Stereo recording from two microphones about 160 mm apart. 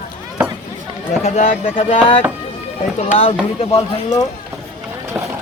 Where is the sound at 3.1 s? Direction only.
35° left (ahead or behind).